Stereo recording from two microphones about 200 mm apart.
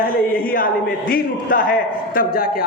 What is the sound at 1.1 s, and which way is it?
A man's voice, 45° left (ahead or behind).